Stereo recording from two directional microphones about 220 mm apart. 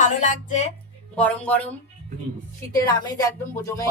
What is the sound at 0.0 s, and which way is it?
Speech, 35° left (ahead or behind).